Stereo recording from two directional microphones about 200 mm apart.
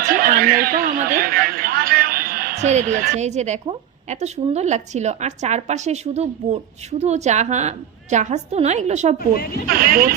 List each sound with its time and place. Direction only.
0.1 s a sound: 45° right (ahead or behind)
2.6 s a woman's voice: 35° right (ahead or behind)
9.1 s a woman's voice: 50° left (ahead or behind)
9.6 s speech: 45° right (ahead or behind)